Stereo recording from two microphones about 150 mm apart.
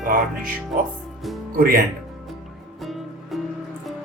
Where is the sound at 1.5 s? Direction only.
75° right (ahead or behind).